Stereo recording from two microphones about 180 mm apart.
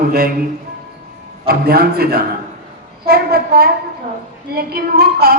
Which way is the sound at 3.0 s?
60° right (ahead or behind).